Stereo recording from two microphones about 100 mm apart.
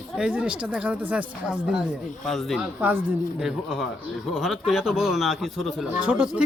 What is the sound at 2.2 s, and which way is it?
Speech, centre (ahead or behind).